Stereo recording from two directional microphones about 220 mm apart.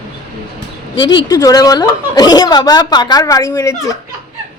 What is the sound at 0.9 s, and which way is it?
A woman's voice, 20° left (ahead or behind).